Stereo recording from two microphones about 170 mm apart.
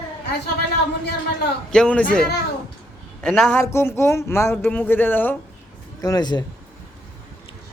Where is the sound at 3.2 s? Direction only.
5° left (ahead or behind).